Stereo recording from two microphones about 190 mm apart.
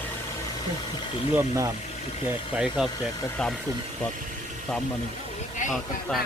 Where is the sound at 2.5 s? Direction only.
5° right (ahead or behind).